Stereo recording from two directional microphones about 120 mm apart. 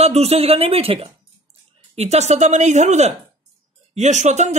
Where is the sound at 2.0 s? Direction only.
65° right (ahead or behind).